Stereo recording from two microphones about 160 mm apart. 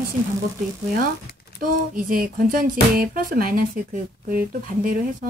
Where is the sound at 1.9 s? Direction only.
60° right (ahead or behind).